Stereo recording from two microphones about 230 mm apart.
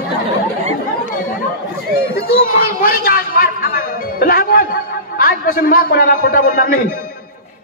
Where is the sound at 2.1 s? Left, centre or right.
Left.